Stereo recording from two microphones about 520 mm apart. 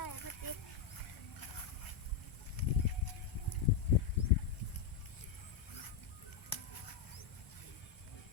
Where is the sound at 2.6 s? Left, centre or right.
Left.